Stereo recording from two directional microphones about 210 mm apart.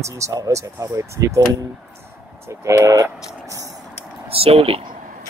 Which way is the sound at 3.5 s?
15° right (ahead or behind).